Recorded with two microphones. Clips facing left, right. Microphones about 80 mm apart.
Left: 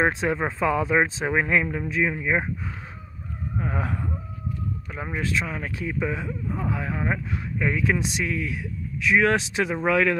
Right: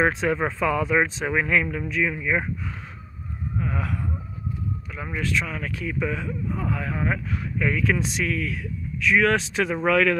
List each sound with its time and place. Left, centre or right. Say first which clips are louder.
0.0 s speech: right 1 dB; centre
3.5 s speech: even; left; by 10.1 s centre